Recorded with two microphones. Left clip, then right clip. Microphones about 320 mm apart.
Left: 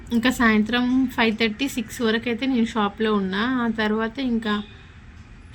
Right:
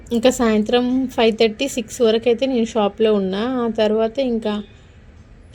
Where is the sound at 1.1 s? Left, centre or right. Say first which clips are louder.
Right 6 dB; centre.